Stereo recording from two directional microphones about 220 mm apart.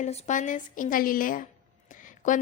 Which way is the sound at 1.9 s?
35° left (ahead or behind).